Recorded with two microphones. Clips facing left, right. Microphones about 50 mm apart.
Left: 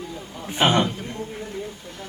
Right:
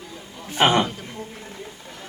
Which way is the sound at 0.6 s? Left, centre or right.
Right.